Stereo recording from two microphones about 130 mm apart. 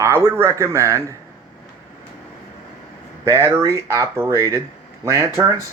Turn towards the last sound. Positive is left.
turn(degrees=-25)  # may be behind; listen again after turning